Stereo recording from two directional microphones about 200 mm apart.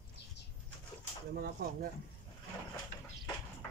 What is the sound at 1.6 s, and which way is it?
Speech, 55° right (ahead or behind).